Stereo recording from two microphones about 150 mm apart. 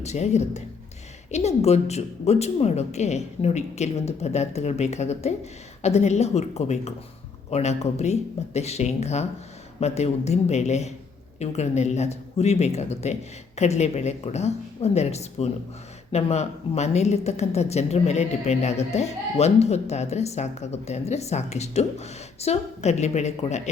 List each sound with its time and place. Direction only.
0.0 s a woman's voice: 50° left (ahead or behind)